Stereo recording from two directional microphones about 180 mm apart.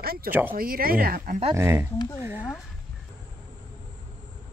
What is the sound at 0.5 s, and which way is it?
Speech, 55° right (ahead or behind).